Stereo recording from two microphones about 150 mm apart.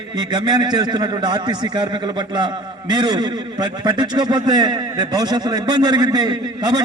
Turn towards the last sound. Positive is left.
turn(degrees=-25)  # may be behind; listen again after turning